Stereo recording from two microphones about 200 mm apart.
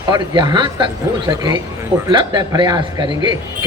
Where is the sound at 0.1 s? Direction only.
20° right (ahead or behind).